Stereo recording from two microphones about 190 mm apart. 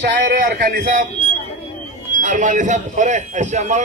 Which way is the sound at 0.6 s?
45° right (ahead or behind).